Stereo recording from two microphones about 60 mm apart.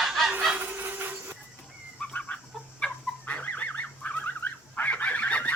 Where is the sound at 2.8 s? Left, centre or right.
Centre.